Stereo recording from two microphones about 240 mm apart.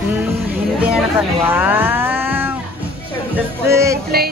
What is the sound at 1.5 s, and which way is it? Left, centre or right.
Cat, centre.